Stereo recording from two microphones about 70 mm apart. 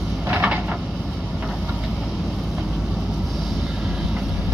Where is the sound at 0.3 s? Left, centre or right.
Centre.